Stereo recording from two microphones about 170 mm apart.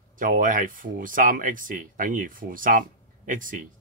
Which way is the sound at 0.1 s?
50° right (ahead or behind).